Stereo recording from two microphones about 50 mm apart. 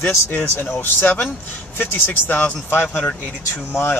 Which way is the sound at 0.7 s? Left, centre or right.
Left.